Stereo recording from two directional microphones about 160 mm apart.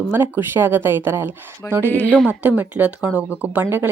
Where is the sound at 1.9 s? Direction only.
10° left (ahead or behind).